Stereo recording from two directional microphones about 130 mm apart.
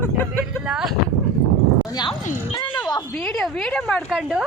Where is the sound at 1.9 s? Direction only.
35° left (ahead or behind).